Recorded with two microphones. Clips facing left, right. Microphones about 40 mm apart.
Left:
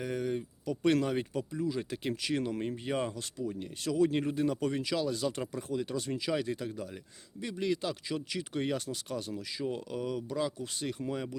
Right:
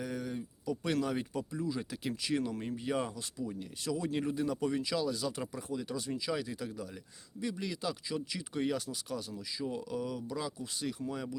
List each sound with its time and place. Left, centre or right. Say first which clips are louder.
0.0 s a sound: left 5 dB; left
0.6 s speech: left 1 dB; left
1.0 s speech: left 3 dB; left
1.3 s speech: left 2 dB; left
4.6 s speech: left 1 dB; left
6.3 s speech: left 4 dB; left
8.1 s speech: left 2 dB; left